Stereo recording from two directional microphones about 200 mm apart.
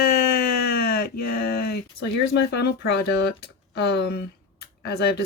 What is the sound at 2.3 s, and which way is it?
Speech, 60° left (ahead or behind).